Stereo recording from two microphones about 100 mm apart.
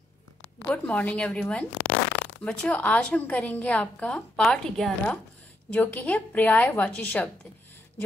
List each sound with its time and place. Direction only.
0.7 s a woman's voice: 15° left (ahead or behind)